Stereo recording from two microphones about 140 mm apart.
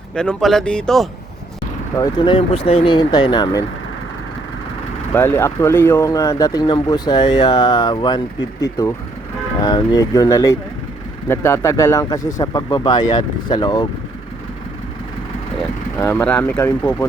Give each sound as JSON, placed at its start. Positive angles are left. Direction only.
{"t": 0.2, "sound": "speech", "side_deg": 5}
{"t": 2.0, "sound": "speech", "side_deg": 30}
{"t": 5.1, "sound": "speech", "side_deg": 15}
{"t": 8.8, "sound": "speech", "side_deg": 25}
{"t": 16.0, "sound": "speech", "side_deg": 20}
{"t": 16.2, "sound": "speech", "side_deg": 10}